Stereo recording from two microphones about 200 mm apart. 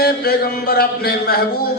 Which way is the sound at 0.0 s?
50° left (ahead or behind).